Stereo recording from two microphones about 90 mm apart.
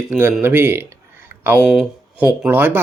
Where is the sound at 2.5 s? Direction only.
20° right (ahead or behind).